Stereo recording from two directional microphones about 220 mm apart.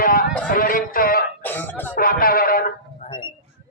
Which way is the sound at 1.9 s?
40° left (ahead or behind).